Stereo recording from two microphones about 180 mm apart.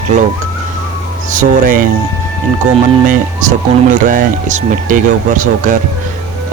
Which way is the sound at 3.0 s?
45° right (ahead or behind).